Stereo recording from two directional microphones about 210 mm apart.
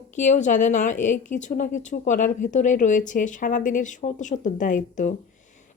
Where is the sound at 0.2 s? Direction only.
35° left (ahead or behind).